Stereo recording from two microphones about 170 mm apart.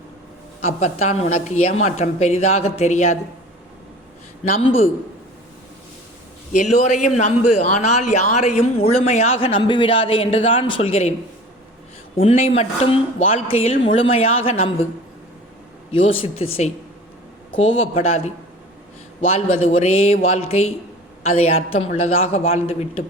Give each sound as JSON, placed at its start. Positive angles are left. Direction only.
{"t": 0.8, "sound": "speech", "side_deg": 40}
{"t": 4.5, "sound": "speech", "side_deg": 35}
{"t": 6.5, "sound": "a man's voice", "side_deg": 45}
{"t": 12.2, "sound": "speech", "side_deg": 40}
{"t": 15.9, "sound": "speech", "side_deg": 35}
{"t": 17.7, "sound": "speech", "side_deg": 35}
{"t": 19.3, "sound": "speech", "side_deg": 35}